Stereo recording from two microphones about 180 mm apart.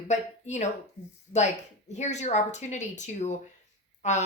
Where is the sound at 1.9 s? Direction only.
40° left (ahead or behind).